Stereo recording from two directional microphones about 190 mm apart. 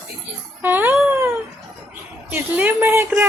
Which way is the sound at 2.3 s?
10° right (ahead or behind).